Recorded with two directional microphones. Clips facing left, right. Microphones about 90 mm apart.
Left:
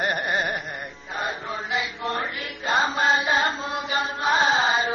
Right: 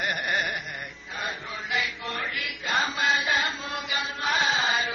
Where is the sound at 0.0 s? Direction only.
35° left (ahead or behind).